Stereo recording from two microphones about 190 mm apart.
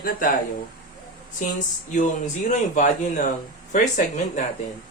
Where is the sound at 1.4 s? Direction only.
40° left (ahead or behind).